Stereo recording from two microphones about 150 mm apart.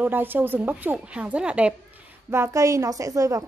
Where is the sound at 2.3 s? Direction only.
20° right (ahead or behind).